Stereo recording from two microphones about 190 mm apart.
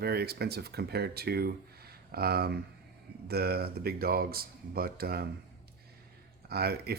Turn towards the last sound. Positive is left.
turn(degrees=-55)  # may be behind; listen again after turning